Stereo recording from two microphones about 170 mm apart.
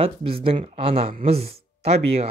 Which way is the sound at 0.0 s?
35° right (ahead or behind).